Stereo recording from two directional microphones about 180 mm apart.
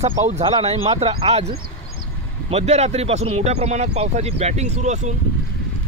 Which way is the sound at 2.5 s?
40° right (ahead or behind).